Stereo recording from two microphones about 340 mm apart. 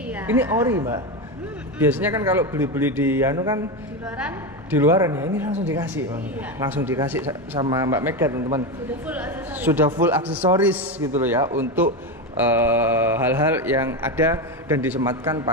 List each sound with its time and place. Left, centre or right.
0.1 s speech: centre